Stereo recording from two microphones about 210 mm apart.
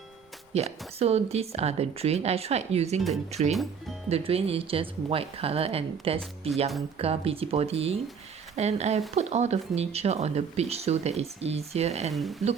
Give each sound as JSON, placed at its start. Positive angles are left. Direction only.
{"t": 0.5, "sound": "speech", "side_deg": -30}
{"t": 3.5, "sound": "speech", "side_deg": 0}
{"t": 4.1, "sound": "speech", "side_deg": -30}
{"t": 12.1, "sound": "speech", "side_deg": 0}